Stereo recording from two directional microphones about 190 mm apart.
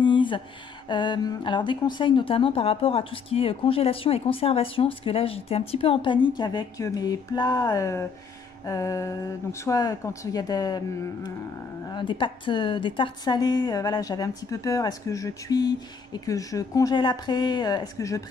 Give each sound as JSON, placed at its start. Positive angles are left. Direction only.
{"t": 0.0, "sound": "a sound", "side_deg": 25}
{"t": 0.8, "sound": "speech", "side_deg": 25}
{"t": 11.9, "sound": "speech", "side_deg": 25}